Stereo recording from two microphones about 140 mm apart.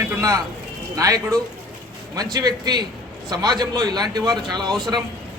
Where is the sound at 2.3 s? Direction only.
30° right (ahead or behind).